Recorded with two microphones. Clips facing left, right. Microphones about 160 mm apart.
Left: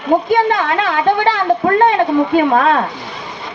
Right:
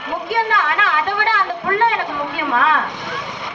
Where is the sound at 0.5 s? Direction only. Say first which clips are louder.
Left 3 dB; 35° left (ahead or behind).